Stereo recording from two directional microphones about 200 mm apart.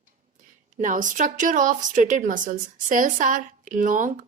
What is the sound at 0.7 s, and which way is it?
A woman's voice, 40° right (ahead or behind).